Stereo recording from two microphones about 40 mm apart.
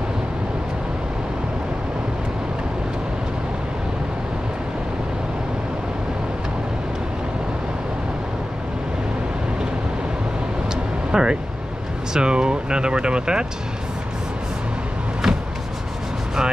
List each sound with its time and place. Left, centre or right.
11.1 s vehicle: right
12.1 s speech: right
15.2 s vehicle: centre